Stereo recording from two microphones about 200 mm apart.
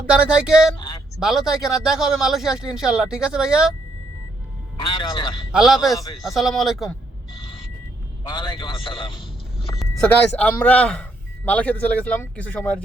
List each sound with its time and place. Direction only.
0.1 s speech: 5° right (ahead or behind)
5.5 s speech: centre (ahead or behind)
8.3 s a man's voice: 20° left (ahead or behind)
9.7 s speech: 5° left (ahead or behind)